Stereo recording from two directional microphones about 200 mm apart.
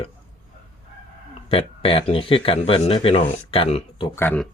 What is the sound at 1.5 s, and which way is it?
Speech, 30° left (ahead or behind).